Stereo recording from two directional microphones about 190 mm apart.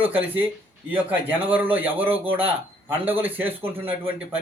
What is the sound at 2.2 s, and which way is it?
Speech, 30° right (ahead or behind).